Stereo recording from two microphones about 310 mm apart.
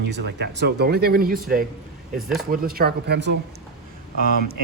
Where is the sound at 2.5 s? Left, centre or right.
Right.